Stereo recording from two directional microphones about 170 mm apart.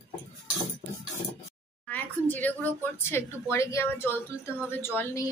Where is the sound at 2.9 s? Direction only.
15° left (ahead or behind).